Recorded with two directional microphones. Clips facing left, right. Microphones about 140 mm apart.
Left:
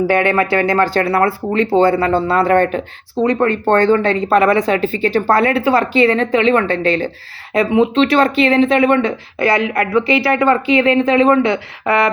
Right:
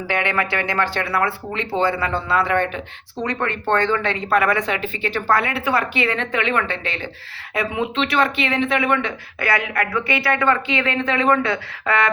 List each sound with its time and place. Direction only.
0.1 s speech: 40° left (ahead or behind); by 12.1 s 25° left (ahead or behind)